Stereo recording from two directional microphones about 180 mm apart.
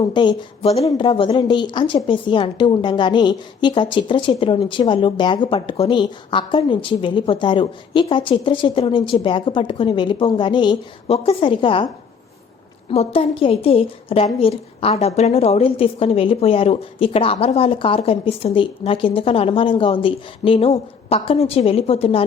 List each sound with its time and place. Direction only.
0.0 s a woman's voice: 25° left (ahead or behind)
12.9 s a woman's voice: 35° left (ahead or behind)